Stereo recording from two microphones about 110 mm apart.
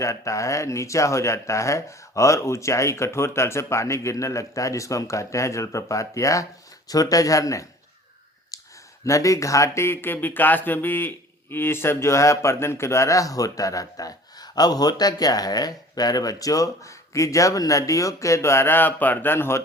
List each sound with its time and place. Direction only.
0.0 s speech: 30° left (ahead or behind)
9.0 s speech: 30° left (ahead or behind)